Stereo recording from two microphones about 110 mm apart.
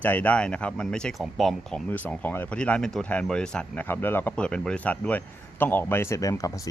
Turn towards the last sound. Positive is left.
turn(degrees=30)  # may be behind; listen again after turning